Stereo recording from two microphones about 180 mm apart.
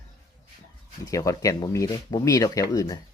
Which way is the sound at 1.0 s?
20° left (ahead or behind).